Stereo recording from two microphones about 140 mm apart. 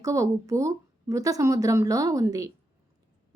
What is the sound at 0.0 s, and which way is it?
Speech, 20° right (ahead or behind).